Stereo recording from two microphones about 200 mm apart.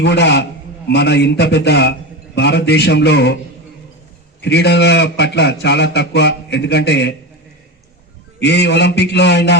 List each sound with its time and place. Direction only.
0.0 s a man's voice: 60° left (ahead or behind)
4.4 s a man's voice: 55° left (ahead or behind)
8.4 s a man's voice: 60° left (ahead or behind)